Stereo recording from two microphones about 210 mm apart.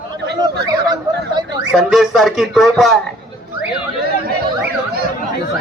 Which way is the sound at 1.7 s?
Centre (ahead or behind).